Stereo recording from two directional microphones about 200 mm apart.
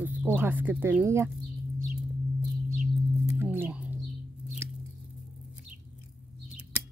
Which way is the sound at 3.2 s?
10° right (ahead or behind).